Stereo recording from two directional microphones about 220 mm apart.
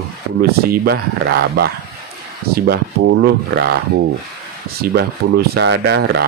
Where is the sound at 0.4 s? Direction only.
45° right (ahead or behind).